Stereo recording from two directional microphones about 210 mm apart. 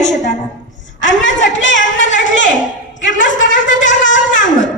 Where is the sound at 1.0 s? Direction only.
60° left (ahead or behind).